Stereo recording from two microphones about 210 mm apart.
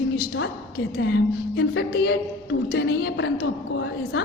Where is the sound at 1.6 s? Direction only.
55° left (ahead or behind).